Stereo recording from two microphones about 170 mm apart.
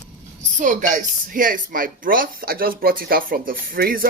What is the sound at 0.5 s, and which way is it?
Speech, 50° right (ahead or behind).